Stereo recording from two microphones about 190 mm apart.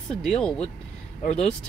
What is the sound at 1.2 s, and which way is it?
Speech, 35° left (ahead or behind).